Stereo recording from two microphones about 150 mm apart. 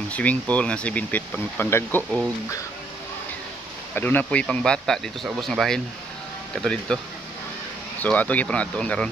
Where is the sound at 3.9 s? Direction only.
10° left (ahead or behind).